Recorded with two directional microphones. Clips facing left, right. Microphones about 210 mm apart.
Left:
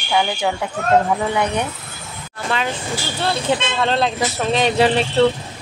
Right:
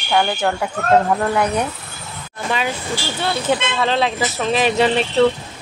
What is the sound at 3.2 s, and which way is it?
Speech, centre (ahead or behind).